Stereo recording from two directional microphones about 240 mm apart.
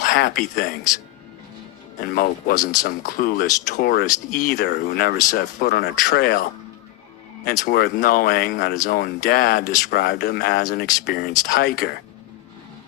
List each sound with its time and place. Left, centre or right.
0.0 s speech: left
2.0 s speech: left
7.4 s speech: left